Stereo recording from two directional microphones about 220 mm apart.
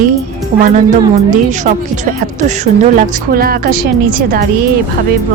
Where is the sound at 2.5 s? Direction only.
35° right (ahead or behind).